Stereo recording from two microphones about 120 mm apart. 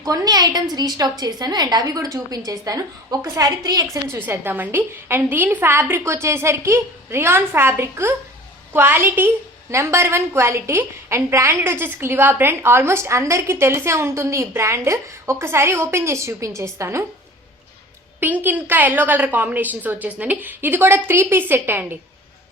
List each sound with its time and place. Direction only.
0.0 s a woman's voice: 30° right (ahead or behind)
18.2 s a woman's voice: 15° right (ahead or behind)